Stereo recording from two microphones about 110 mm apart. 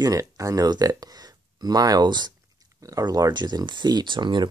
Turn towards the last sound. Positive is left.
turn(degrees=-45)  # may be behind; listen again after turning